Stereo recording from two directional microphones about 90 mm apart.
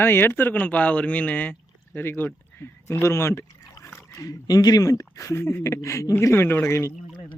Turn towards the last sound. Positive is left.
turn(degrees=30)  # may be behind; listen again after turning